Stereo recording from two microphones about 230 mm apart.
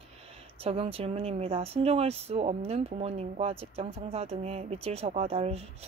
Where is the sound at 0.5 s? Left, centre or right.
Right.